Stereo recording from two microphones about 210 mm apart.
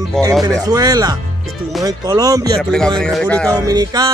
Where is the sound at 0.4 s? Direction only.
20° right (ahead or behind).